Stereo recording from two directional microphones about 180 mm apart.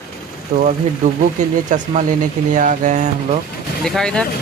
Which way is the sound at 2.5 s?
45° right (ahead or behind).